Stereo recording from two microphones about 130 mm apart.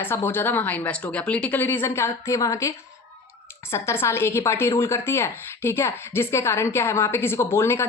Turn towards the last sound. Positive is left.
turn(degrees=20)  # may be behind; listen again after turning